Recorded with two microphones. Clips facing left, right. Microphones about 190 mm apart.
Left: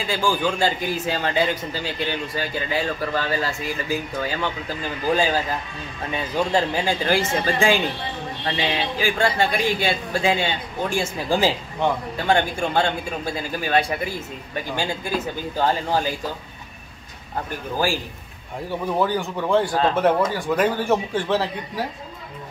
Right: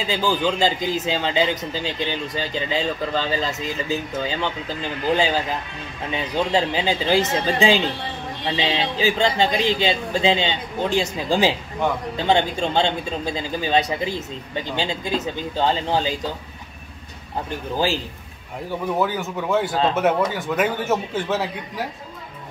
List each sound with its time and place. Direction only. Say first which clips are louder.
0.0 s a man's voice: right 1 dB; 20° right (ahead or behind)
17.7 s a man's voice: right 1 dB; 20° right (ahead or behind)
18.9 s a man's voice: left 3 dB; 5° right (ahead or behind)